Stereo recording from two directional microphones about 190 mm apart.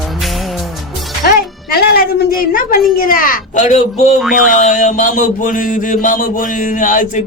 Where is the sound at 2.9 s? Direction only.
45° left (ahead or behind).